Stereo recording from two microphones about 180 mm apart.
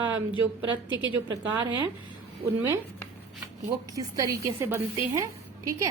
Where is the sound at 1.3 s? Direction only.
20° right (ahead or behind).